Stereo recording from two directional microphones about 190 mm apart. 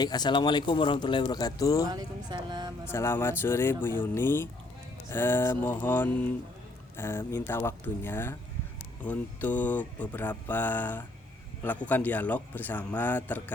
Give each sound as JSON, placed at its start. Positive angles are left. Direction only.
{"t": 0.0, "sound": "speech", "side_deg": 20}
{"t": 1.9, "sound": "speech", "side_deg": -20}
{"t": 2.8, "sound": "a man's voice", "side_deg": 15}